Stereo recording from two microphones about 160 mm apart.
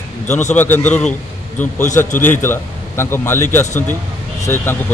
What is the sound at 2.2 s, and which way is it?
A man's voice, 15° left (ahead or behind).